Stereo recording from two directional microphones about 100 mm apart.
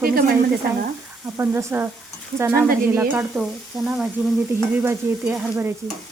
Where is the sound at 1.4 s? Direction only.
25° right (ahead or behind).